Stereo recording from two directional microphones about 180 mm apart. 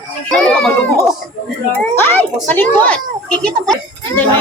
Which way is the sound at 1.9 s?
10° left (ahead or behind).